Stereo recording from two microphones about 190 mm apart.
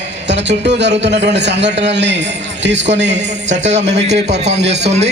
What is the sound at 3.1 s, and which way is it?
Speech, 40° right (ahead or behind).